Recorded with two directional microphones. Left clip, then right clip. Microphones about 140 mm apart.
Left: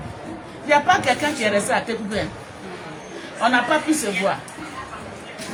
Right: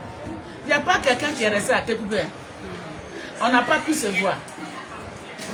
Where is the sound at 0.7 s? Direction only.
15° right (ahead or behind).